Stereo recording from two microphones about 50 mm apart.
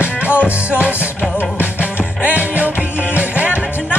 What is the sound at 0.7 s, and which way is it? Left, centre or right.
Music, right.